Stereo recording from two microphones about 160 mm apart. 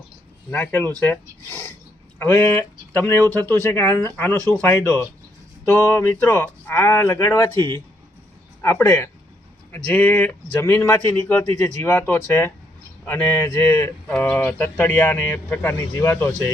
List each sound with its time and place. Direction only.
0.5 s speech: 10° left (ahead or behind)